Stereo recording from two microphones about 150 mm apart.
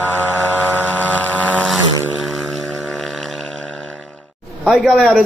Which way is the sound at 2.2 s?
Centre (ahead or behind).